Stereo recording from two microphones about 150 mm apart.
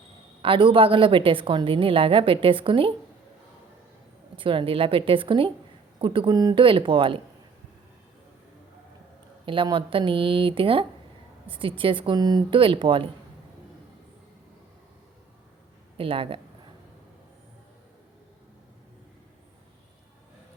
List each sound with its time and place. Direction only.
0.4 s a woman's voice: 35° right (ahead or behind)
4.4 s a woman's voice: 35° right (ahead or behind)
9.5 s a woman's voice: 35° right (ahead or behind)
16.0 s a woman's voice: 35° right (ahead or behind)